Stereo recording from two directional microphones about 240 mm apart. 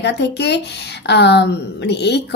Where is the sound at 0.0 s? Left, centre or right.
Left.